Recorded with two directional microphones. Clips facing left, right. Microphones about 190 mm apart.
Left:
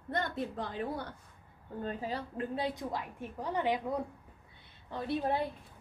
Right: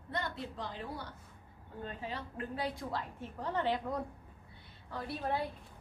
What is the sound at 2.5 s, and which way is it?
Speech, 25° left (ahead or behind).